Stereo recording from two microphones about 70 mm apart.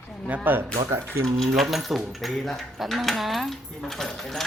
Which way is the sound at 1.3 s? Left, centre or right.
Centre.